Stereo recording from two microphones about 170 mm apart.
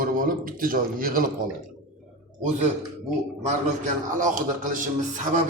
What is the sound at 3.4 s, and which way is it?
A man's voice, 45° right (ahead or behind).